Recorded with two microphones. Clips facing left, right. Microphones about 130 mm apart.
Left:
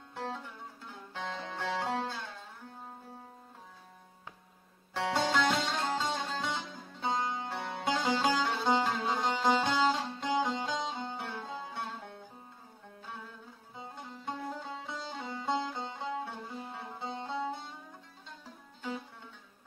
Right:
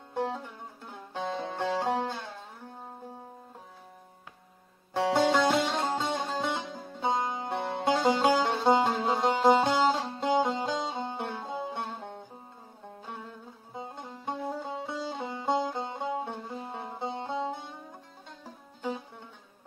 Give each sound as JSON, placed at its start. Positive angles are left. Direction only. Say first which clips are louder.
{"t": 0.1, "sound": "music", "louder": "right 7 dB", "side_deg": -15}
{"t": 4.9, "sound": "music", "louder": "right 6 dB", "side_deg": -15}
{"t": 7.5, "sound": "music", "louder": "right 8 dB", "side_deg": -35}
{"t": 11.1, "sound": "music", "louder": "right 5 dB", "side_deg": -20}
{"t": 14.2, "sound": "music", "louder": "right 5 dB", "side_deg": -15}